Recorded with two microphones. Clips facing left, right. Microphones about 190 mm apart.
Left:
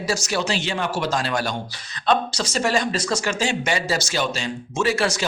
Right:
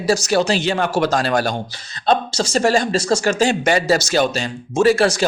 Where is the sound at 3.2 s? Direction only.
45° right (ahead or behind).